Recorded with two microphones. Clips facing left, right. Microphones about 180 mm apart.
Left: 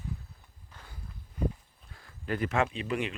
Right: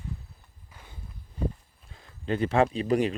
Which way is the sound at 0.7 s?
10° right (ahead or behind).